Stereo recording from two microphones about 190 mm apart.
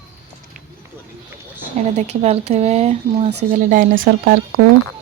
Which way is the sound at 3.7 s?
45° right (ahead or behind).